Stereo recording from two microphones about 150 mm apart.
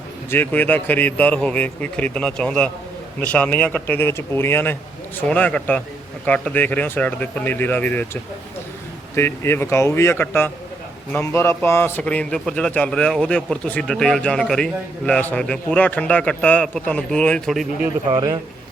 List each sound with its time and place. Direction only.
0.3 s a man's voice: 15° left (ahead or behind)